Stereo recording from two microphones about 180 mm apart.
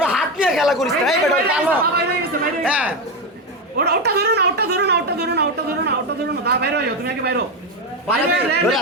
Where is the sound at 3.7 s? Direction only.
65° right (ahead or behind).